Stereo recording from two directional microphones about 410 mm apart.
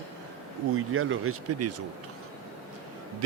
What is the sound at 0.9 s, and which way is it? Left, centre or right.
Speech, right.